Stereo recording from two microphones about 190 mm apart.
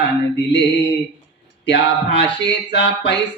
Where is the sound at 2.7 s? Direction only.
70° left (ahead or behind).